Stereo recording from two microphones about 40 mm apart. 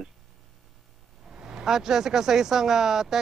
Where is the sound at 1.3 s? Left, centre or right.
Centre.